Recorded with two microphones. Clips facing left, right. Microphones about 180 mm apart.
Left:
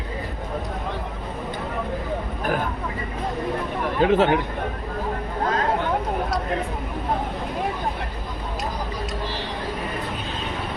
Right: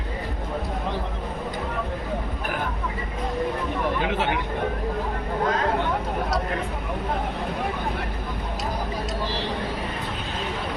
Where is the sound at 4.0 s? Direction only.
45° left (ahead or behind).